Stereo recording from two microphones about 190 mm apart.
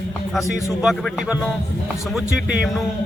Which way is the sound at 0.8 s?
5° right (ahead or behind).